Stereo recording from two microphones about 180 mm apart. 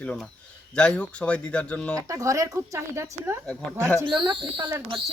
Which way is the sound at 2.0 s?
15° right (ahead or behind).